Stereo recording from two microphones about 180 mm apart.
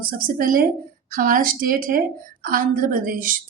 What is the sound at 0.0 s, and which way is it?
A woman's voice, 55° right (ahead or behind).